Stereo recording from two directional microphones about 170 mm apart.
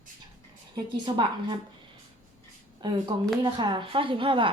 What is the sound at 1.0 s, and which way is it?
Speech, 25° right (ahead or behind).